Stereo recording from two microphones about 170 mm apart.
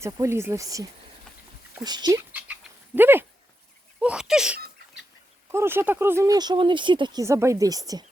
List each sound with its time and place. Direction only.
0.0 s speech: 15° right (ahead or behind)
2.3 s goat: 10° right (ahead or behind)
4.0 s speech: 5° right (ahead or behind); by 8.0 s 20° right (ahead or behind)